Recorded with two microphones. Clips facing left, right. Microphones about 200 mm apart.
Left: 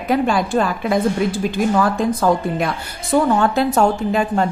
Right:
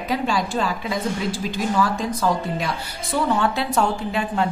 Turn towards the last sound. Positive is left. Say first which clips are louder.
# left 5 dB
turn(degrees=45)  # may be behind; listen again after turning